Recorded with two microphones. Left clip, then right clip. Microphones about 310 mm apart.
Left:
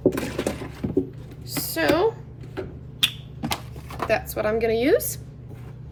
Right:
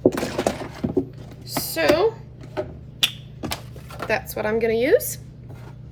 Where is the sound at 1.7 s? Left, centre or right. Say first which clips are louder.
Right 2 dB; centre.